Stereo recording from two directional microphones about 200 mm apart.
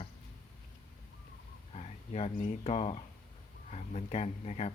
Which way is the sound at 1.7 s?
35° left (ahead or behind).